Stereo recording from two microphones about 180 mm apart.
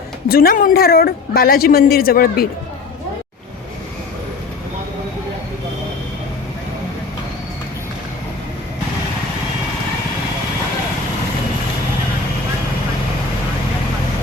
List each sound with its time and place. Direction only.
0.3 s speech: 55° left (ahead or behind)